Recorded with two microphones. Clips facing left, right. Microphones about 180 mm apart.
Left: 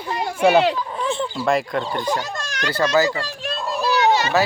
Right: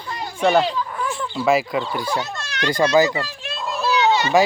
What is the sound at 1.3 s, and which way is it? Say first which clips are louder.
Speech: right 5 dB; centre (ahead or behind).